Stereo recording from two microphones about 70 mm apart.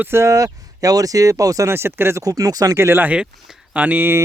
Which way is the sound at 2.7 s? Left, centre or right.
Right.